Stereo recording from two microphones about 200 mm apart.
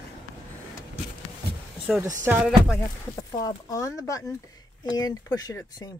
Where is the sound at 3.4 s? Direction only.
20° left (ahead or behind).